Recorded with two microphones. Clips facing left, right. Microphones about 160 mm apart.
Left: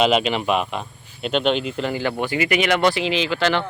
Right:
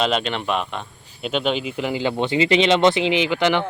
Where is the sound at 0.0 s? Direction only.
5° left (ahead or behind).